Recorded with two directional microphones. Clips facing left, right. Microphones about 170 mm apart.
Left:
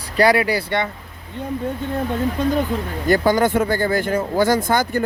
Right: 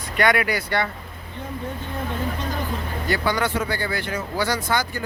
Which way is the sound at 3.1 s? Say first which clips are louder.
Left 7 dB; 45° left (ahead or behind).